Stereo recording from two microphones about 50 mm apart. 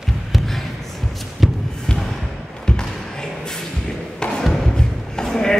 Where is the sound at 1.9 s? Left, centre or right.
Centre.